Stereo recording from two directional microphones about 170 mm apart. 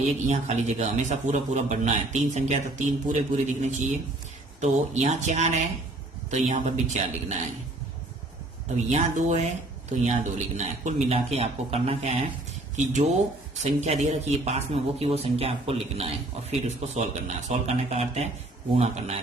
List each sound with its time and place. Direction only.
0.3 s a man's voice: 45° right (ahead or behind)
8.9 s a man's voice: 40° right (ahead or behind)